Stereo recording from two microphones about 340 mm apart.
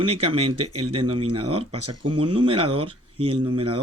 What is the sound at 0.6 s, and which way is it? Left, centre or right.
Speech, right.